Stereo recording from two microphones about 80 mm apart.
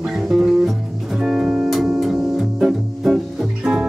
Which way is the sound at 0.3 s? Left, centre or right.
Centre.